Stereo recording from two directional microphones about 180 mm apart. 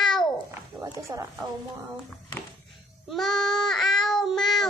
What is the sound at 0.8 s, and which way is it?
Speech, 20° right (ahead or behind).